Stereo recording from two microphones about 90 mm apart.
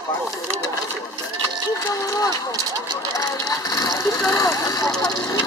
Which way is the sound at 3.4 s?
40° left (ahead or behind).